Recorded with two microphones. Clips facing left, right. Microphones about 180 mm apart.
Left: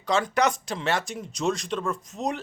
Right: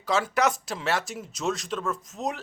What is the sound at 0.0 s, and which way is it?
Speech, 5° right (ahead or behind).